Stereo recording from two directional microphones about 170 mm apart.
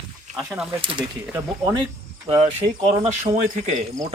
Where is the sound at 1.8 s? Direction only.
25° right (ahead or behind).